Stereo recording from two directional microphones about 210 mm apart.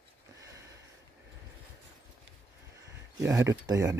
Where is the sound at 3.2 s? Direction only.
15° right (ahead or behind).